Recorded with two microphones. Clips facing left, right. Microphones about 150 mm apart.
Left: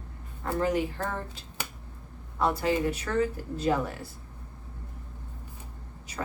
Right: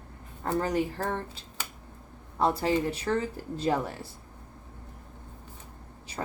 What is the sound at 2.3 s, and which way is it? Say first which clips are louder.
A woman's voice: right 1 dB; 30° right (ahead or behind).